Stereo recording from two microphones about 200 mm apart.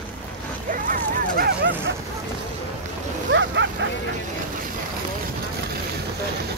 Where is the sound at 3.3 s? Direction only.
65° right (ahead or behind).